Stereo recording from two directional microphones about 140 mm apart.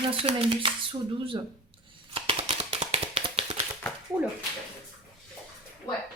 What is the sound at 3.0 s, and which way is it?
Tap, 40° right (ahead or behind).